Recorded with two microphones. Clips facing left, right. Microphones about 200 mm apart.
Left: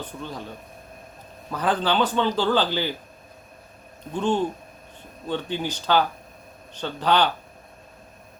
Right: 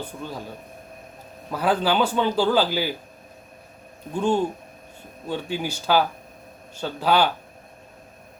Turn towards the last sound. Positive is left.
turn(degrees=-10)  # may be behind; listen again after turning